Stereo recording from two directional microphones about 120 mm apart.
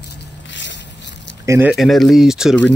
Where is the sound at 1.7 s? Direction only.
Centre (ahead or behind).